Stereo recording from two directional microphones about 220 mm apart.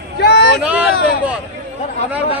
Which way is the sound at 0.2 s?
50° left (ahead or behind).